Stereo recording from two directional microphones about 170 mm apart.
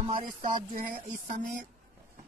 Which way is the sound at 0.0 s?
35° right (ahead or behind).